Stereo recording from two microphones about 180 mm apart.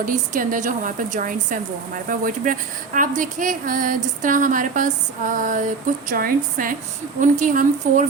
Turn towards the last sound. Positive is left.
turn(degrees=-45)  # may be behind; listen again after turning